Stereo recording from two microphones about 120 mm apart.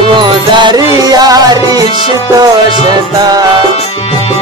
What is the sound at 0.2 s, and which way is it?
Music, 40° right (ahead or behind).